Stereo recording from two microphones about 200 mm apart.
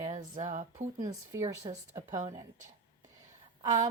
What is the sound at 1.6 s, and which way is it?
Speech, 35° right (ahead or behind).